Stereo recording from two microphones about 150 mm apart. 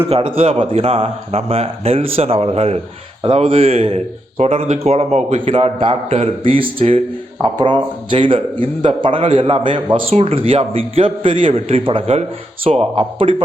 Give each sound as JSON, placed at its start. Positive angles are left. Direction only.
{"t": 0.1, "sound": "speech", "side_deg": -40}